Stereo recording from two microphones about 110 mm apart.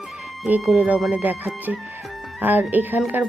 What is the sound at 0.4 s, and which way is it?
Speech, 10° right (ahead or behind).